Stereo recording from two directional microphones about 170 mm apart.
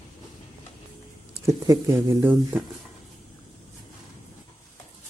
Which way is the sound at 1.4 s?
15° right (ahead or behind).